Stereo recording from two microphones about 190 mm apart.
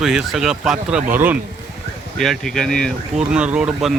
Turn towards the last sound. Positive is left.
turn(degrees=-5)  # may be behind; listen again after turning